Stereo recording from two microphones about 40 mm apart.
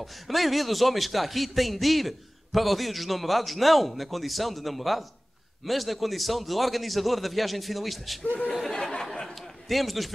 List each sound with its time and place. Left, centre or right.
0.0 s a man's voice: centre
8.2 s speech: left
8.5 s a man's voice: centre
9.0 s a sound: centre
9.7 s a man's voice: centre